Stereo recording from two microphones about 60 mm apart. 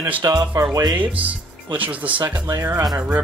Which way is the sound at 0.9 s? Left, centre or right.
Right.